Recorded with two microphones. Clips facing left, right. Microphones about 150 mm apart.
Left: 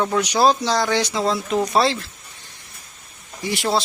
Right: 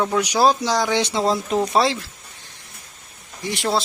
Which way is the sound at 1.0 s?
30° right (ahead or behind).